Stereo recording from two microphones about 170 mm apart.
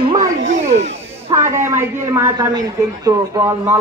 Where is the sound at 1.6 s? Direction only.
15° right (ahead or behind).